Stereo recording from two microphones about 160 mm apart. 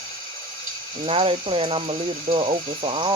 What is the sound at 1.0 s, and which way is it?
Speech, 35° right (ahead or behind).